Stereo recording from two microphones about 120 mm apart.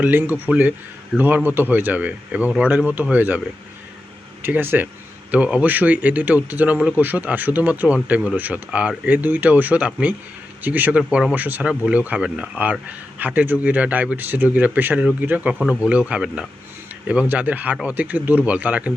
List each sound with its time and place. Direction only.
0.0 s speech: 15° right (ahead or behind)
1.1 s a man's voice: centre (ahead or behind)
1.5 s speech: 15° right (ahead or behind)
4.4 s speech: 15° right (ahead or behind)